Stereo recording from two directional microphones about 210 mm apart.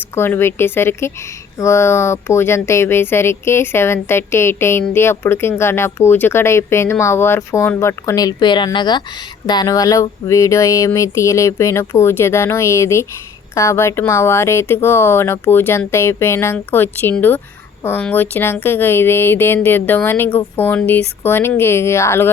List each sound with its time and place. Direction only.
0.2 s speech: 10° left (ahead or behind)